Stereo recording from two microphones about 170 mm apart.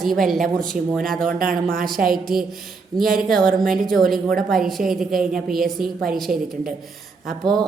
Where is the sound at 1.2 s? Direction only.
55° right (ahead or behind).